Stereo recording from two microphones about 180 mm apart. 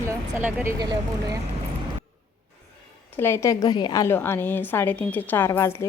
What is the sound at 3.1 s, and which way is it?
A woman's voice, 15° left (ahead or behind).